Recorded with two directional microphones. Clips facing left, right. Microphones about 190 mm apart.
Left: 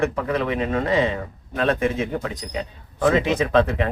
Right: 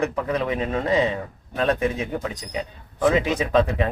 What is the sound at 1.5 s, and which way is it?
Speech, 20° right (ahead or behind).